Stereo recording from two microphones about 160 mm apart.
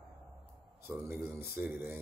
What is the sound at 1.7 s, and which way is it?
Speech, 10° right (ahead or behind).